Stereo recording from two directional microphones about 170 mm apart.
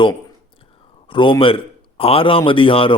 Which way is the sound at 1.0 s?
30° left (ahead or behind).